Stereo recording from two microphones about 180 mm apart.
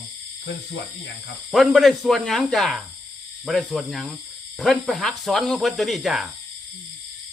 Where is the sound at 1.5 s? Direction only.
Centre (ahead or behind).